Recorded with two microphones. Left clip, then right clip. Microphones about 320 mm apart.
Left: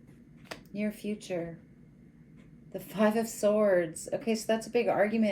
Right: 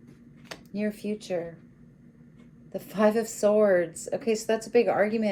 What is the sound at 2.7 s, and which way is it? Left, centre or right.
Speech, centre.